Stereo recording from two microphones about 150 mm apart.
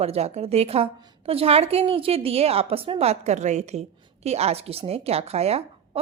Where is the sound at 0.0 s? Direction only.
45° right (ahead or behind).